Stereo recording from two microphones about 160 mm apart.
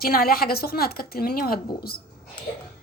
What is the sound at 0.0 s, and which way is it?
A woman's voice, 70° left (ahead or behind).